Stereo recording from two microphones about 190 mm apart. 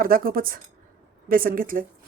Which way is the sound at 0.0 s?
50° right (ahead or behind).